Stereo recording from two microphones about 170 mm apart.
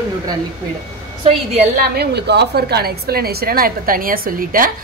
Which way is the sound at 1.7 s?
65° right (ahead or behind).